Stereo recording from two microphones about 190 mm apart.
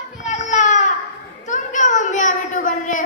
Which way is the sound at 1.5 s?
40° left (ahead or behind).